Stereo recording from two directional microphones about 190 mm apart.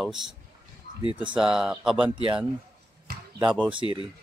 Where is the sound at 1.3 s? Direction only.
5° right (ahead or behind).